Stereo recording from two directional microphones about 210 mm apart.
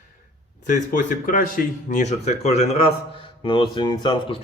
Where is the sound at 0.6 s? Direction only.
40° left (ahead or behind); by 4.4 s 20° left (ahead or behind).